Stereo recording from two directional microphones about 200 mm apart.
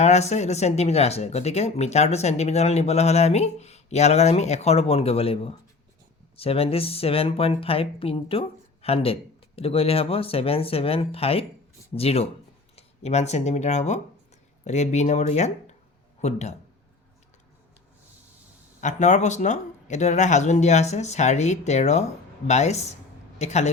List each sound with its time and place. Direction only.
0.0 s speech: 35° left (ahead or behind)
18.8 s speech: 35° left (ahead or behind)